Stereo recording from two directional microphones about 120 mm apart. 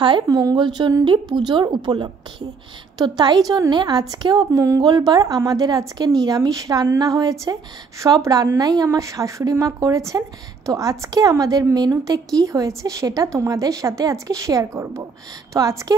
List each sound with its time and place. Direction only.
0.0 s a woman's voice: 40° right (ahead or behind)